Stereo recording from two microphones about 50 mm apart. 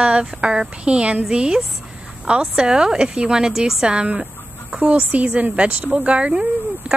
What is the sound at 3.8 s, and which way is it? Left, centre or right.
A woman's voice, right.